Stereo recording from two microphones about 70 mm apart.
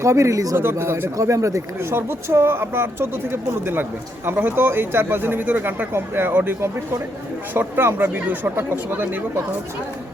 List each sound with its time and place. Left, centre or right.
0.0 s speech: right
0.5 s speech: right
1.1 s speech: right
4.3 s speech: right